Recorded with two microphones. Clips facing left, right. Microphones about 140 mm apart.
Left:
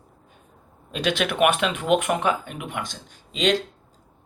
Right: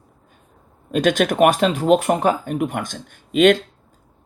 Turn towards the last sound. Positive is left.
turn(degrees=-55)  # may be behind; listen again after turning